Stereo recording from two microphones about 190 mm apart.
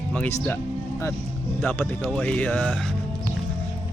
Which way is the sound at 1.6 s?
10° left (ahead or behind).